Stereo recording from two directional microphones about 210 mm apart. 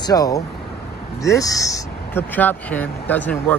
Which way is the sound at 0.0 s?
15° left (ahead or behind).